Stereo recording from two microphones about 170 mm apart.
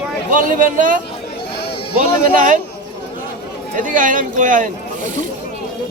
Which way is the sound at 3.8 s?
50° right (ahead or behind).